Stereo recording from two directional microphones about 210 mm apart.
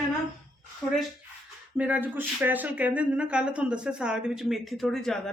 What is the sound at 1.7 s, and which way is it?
Speech, 5° right (ahead or behind).